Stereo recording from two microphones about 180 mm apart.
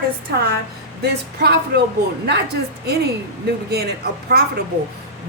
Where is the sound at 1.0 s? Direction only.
65° right (ahead or behind).